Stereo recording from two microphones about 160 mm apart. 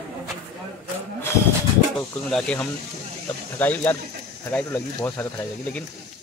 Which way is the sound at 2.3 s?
5° left (ahead or behind).